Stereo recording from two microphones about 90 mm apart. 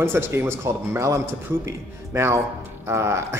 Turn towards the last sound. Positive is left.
turn(degrees=-30)  # may be behind; listen again after turning